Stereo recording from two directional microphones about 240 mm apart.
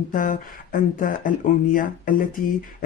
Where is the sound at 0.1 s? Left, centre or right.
Left.